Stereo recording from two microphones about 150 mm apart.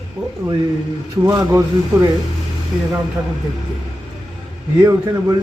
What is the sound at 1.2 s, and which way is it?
Speech, 20° right (ahead or behind).